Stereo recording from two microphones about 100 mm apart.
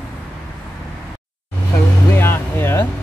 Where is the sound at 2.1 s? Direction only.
25° left (ahead or behind).